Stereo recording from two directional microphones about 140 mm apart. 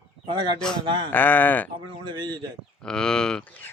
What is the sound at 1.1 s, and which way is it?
Speech, 15° left (ahead or behind).